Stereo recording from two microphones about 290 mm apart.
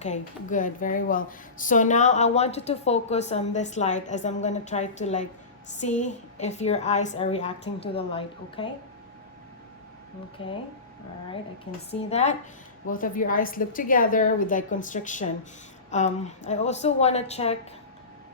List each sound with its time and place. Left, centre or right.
0.0 s speech: left
10.4 s speech: centre
11.9 s speech: left